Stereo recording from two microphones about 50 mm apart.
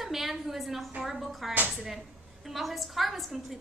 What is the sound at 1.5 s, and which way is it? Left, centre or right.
Speech, right.